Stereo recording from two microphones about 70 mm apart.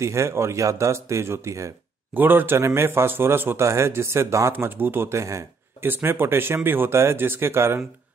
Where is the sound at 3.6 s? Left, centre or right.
Right.